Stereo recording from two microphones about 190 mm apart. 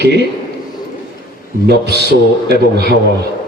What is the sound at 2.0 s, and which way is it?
Speech, 60° right (ahead or behind).